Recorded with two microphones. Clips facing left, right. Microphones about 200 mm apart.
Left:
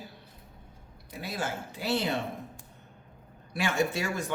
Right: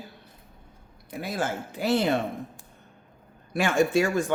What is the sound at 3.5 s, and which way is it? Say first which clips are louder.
Speech: right 6 dB; 50° right (ahead or behind).